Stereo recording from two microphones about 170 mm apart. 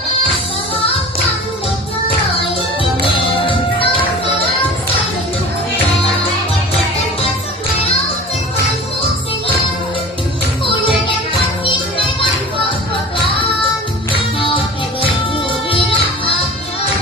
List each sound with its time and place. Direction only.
3.2 s music: 30° left (ahead or behind)
11.6 s music: 30° left (ahead or behind)
14.3 s music: 30° left (ahead or behind)